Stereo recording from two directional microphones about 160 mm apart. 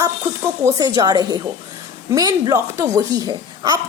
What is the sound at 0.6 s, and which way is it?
A woman's voice, 25° right (ahead or behind).